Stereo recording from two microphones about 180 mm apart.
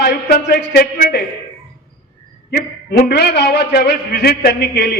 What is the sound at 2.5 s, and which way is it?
A man's voice, 60° left (ahead or behind).